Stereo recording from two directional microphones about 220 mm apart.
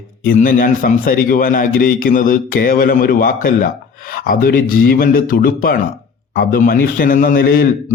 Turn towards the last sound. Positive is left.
turn(degrees=40)  # may be behind; listen again after turning